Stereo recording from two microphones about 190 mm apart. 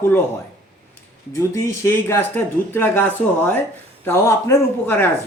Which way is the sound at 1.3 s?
15° left (ahead or behind).